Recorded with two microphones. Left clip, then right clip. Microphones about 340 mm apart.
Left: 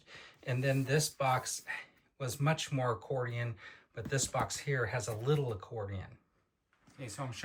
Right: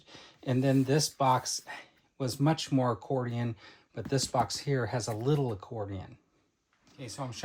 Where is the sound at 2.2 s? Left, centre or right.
Centre.